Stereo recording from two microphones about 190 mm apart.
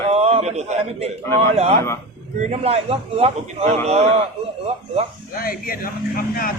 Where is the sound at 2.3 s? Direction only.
35° right (ahead or behind).